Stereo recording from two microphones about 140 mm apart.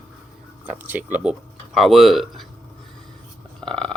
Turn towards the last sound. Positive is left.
turn(degrees=5)  # may be behind; listen again after turning